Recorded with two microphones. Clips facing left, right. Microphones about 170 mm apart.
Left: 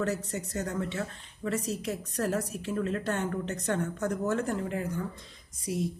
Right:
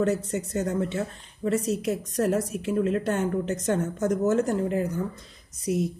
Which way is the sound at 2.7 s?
20° right (ahead or behind).